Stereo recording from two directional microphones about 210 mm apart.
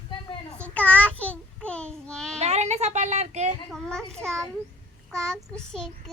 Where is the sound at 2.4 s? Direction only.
30° right (ahead or behind).